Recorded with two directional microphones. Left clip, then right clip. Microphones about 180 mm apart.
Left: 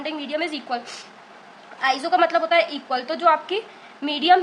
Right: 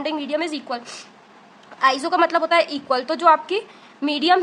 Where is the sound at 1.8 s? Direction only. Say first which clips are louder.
Right 2 dB; 30° right (ahead or behind).